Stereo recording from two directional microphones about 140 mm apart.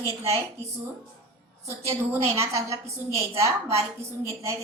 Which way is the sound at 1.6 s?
20° right (ahead or behind).